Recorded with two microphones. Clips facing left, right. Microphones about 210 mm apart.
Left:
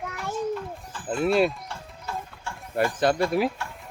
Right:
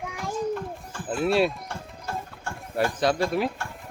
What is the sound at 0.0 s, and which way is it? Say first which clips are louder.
Children playing: even; 10° right (ahead or behind).